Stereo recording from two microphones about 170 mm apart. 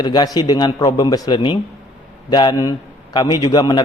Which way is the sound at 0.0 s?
25° left (ahead or behind).